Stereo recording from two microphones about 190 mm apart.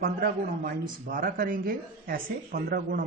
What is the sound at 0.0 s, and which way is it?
Speech, 45° right (ahead or behind).